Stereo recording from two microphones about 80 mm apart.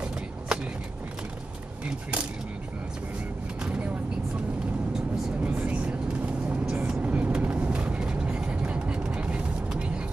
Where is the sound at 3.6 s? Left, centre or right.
Centre.